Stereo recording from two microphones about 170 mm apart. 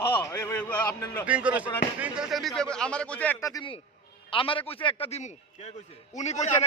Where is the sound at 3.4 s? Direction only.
20° left (ahead or behind).